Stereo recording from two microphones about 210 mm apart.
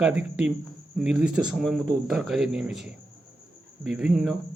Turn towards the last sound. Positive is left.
turn(degrees=0)  # may be behind; listen again after turning